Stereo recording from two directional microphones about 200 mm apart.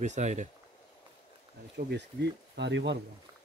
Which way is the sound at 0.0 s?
35° right (ahead or behind).